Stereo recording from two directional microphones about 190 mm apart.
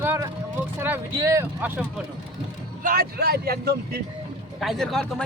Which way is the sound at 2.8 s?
50° right (ahead or behind).